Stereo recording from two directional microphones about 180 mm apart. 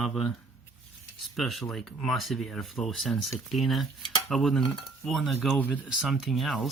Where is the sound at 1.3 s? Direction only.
Centre (ahead or behind).